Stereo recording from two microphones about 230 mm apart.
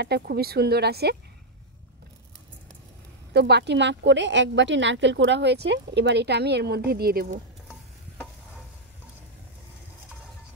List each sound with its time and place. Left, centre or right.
0.0 s a woman's voice: right
3.3 s a woman's voice: right